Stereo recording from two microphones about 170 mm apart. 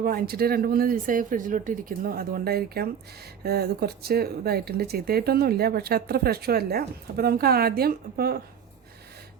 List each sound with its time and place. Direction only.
0.0 s speech: 60° right (ahead or behind)